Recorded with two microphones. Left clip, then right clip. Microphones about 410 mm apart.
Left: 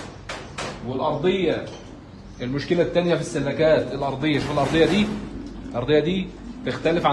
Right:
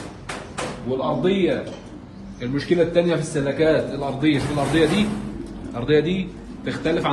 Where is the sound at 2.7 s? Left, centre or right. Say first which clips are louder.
Right 2 dB; centre.